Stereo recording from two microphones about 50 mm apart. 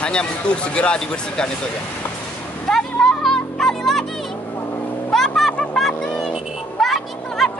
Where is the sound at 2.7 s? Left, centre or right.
Centre.